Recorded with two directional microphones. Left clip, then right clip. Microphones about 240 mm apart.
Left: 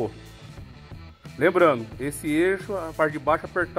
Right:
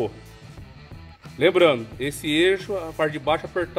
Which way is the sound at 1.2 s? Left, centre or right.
Centre.